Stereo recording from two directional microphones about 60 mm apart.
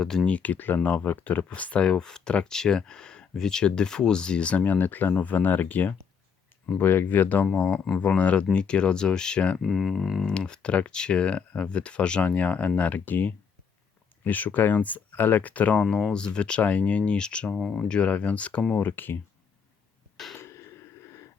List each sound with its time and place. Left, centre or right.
0.3 s speech: left
9.6 s speech: centre
10.2 s speech: centre
15.8 s speech: centre
18.9 s speech: left
20.3 s a sound: left